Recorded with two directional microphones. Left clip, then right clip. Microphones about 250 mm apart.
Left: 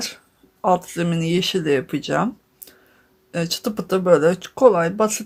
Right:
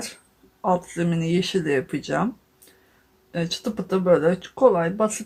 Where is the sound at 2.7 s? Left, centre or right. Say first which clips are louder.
Left 6 dB; left.